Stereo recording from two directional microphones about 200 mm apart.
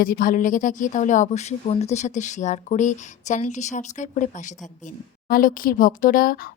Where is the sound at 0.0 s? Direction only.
45° left (ahead or behind).